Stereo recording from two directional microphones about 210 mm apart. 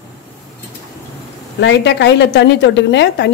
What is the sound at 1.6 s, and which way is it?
A woman's voice, 55° left (ahead or behind).